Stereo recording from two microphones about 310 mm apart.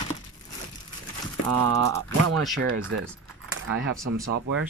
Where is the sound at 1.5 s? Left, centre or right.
Right.